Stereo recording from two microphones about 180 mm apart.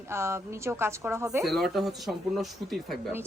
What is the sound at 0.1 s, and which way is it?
A woman's voice, 15° right (ahead or behind).